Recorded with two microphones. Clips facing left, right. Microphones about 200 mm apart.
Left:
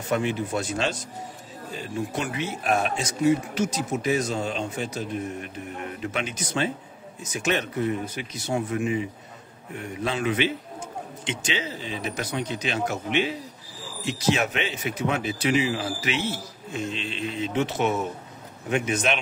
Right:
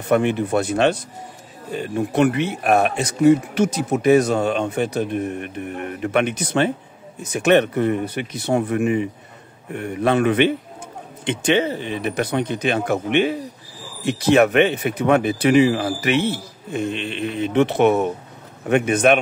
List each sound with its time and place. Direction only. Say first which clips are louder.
0.1 s speech: right 8 dB; 60° right (ahead or behind)